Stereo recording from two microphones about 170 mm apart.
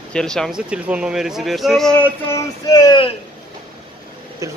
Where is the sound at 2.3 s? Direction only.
20° left (ahead or behind).